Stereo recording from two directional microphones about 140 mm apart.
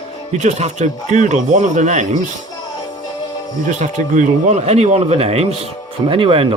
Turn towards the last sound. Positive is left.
turn(degrees=-40)  # may be behind; listen again after turning